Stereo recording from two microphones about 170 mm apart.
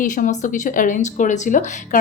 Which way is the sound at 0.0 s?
50° left (ahead or behind).